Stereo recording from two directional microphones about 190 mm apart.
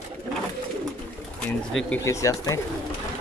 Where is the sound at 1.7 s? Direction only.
10° left (ahead or behind).